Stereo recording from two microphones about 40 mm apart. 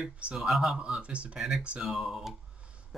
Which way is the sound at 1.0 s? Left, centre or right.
Right.